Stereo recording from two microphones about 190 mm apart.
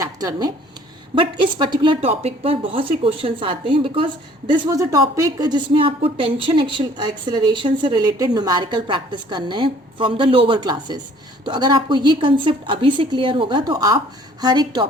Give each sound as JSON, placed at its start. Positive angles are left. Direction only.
{"t": 0.0, "sound": "speech", "side_deg": -20}